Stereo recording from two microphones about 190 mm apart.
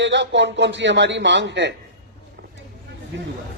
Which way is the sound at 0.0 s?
75° right (ahead or behind).